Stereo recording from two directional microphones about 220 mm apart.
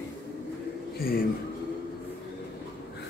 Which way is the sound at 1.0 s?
40° left (ahead or behind).